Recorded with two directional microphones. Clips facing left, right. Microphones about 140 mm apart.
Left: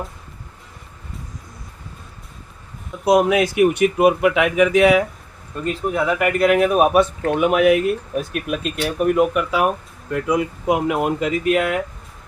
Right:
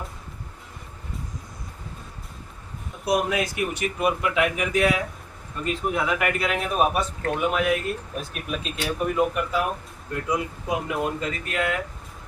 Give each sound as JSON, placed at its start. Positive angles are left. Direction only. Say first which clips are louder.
{"t": 3.0, "sound": "speech", "louder": "left 8 dB", "side_deg": 90}
{"t": 5.6, "sound": "speech", "louder": "left 5 dB", "side_deg": 40}
{"t": 6.6, "sound": "speech", "louder": "left 8 dB", "side_deg": 65}
{"t": 10.1, "sound": "speech", "louder": "left 7 dB", "side_deg": 90}